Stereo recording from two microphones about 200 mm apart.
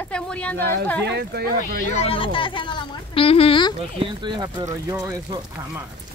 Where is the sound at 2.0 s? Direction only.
25° left (ahead or behind).